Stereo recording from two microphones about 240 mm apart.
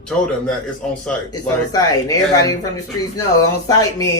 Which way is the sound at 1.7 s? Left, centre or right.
Centre.